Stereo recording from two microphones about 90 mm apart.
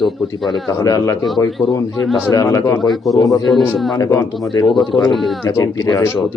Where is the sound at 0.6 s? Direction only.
40° left (ahead or behind).